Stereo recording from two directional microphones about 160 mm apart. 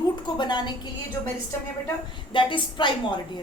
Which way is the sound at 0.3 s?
30° left (ahead or behind).